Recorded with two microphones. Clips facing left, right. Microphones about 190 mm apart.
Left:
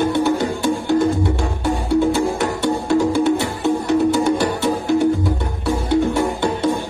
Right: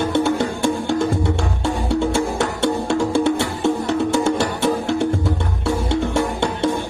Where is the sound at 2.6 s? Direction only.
25° right (ahead or behind).